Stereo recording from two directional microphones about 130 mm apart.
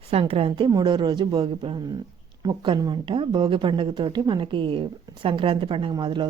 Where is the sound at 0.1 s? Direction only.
50° right (ahead or behind).